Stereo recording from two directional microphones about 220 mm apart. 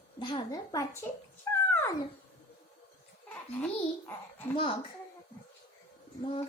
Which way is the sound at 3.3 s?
5° left (ahead or behind).